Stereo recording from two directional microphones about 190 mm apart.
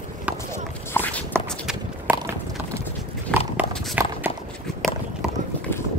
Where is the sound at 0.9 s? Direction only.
10° left (ahead or behind).